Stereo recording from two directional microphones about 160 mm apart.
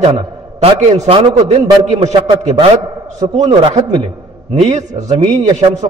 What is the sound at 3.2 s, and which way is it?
Speech, 30° right (ahead or behind).